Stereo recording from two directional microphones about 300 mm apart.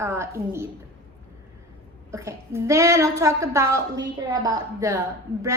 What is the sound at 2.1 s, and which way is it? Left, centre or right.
A woman's voice, centre.